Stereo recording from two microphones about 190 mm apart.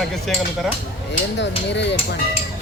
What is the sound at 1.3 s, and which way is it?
Speech, 70° left (ahead or behind).